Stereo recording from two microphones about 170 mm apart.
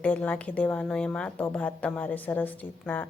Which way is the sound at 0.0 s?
10° left (ahead or behind).